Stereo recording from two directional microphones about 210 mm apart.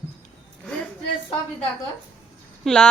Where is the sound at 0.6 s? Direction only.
5° left (ahead or behind).